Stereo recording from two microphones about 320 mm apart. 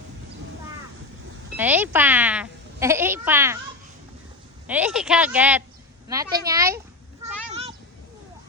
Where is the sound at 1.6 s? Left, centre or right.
Centre.